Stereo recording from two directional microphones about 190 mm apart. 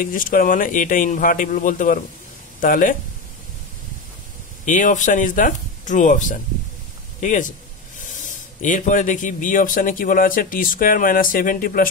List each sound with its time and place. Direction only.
0.0 s speech: 45° left (ahead or behind)
4.6 s a man's voice: 45° left (ahead or behind)